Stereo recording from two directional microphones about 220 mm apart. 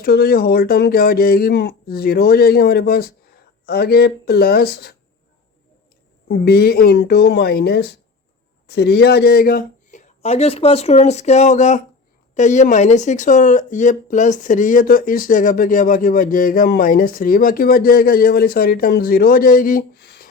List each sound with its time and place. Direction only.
0.0 s speech: 45° left (ahead or behind)
6.2 s speech: 50° left (ahead or behind)